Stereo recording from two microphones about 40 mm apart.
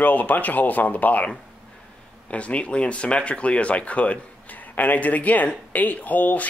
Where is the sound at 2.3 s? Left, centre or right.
Left.